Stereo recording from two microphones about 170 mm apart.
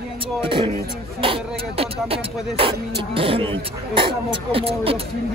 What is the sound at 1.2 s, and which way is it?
Speech, 35° right (ahead or behind).